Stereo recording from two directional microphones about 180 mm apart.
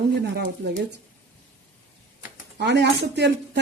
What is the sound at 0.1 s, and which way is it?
Speech, 65° right (ahead or behind).